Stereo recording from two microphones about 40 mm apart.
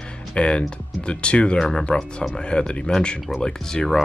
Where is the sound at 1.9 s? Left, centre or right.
Left.